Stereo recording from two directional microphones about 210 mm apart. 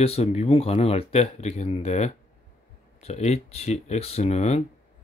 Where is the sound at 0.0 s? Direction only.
30° left (ahead or behind).